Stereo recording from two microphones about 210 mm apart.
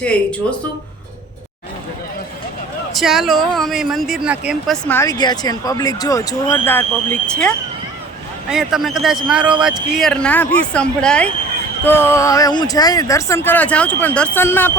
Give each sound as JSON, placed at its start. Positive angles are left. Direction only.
{"t": 0.0, "sound": "speech", "side_deg": 5}
{"t": 2.9, "sound": "speech", "side_deg": 0}
{"t": 4.9, "sound": "speech", "side_deg": 15}